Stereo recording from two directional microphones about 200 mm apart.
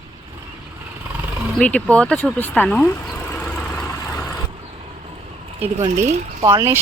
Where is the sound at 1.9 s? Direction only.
5° left (ahead or behind).